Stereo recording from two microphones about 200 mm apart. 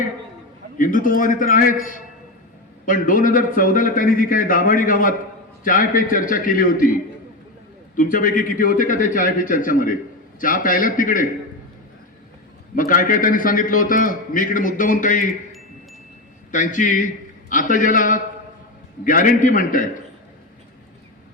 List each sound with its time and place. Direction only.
0.8 s a man's voice: 40° left (ahead or behind)
7.9 s a man's voice: 40° left (ahead or behind)
12.7 s a man's voice: 45° left (ahead or behind)
16.5 s a man's voice: 40° left (ahead or behind)